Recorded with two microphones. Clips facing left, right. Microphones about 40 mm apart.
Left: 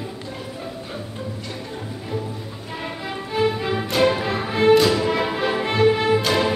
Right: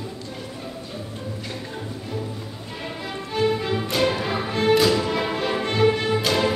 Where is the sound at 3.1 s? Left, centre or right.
Centre.